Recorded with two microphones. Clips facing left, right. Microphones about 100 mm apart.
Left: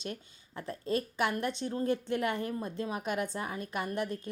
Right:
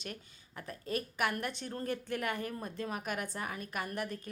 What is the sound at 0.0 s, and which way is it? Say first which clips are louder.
A woman's voice: left 5 dB; 25° left (ahead or behind).